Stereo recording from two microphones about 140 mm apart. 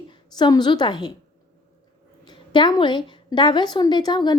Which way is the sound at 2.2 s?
35° left (ahead or behind).